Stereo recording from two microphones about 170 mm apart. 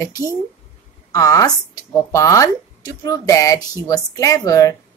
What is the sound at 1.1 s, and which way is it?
Speech, 20° left (ahead or behind).